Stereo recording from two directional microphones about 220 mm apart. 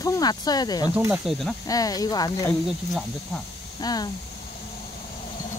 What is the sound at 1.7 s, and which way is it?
Speech, 15° left (ahead or behind).